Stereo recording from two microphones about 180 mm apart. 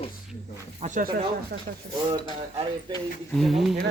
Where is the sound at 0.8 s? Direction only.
45° right (ahead or behind).